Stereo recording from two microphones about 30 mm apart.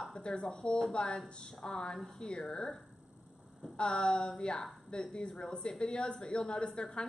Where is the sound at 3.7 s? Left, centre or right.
Left.